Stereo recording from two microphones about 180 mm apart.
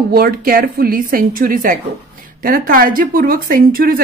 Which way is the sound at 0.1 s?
55° right (ahead or behind).